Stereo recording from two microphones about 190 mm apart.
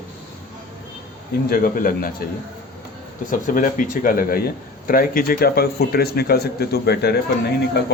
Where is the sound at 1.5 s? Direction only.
50° left (ahead or behind).